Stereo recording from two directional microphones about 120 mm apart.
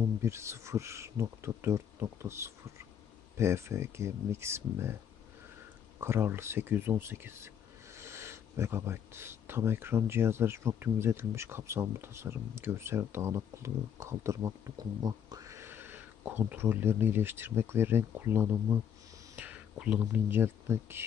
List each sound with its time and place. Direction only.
0.2 s speech: 25° right (ahead or behind)
5.9 s speech: 20° right (ahead or behind)